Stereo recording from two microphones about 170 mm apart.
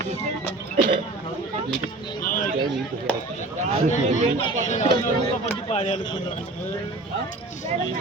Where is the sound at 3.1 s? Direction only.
10° left (ahead or behind).